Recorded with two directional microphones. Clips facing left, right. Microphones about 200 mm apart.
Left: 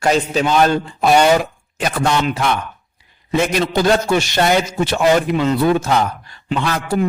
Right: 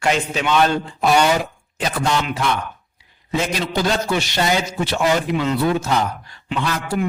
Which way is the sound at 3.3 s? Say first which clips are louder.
Left 5 dB; 60° left (ahead or behind).